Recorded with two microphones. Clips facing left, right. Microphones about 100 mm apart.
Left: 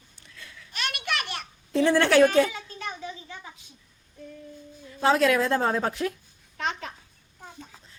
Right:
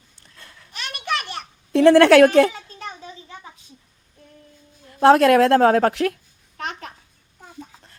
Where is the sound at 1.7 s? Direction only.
85° right.